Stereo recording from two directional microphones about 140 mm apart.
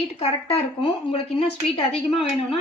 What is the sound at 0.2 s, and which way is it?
A woman's voice, 45° left (ahead or behind).